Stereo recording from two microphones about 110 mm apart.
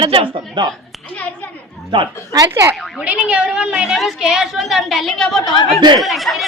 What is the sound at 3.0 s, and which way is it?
A woman's voice, 10° right (ahead or behind).